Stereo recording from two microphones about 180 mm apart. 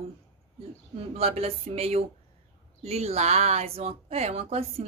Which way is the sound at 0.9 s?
35° right (ahead or behind).